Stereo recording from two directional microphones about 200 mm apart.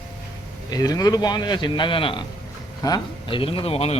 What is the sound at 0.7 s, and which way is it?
Speech, 20° left (ahead or behind).